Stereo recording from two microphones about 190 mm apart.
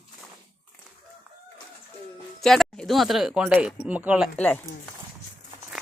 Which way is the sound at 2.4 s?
Centre (ahead or behind).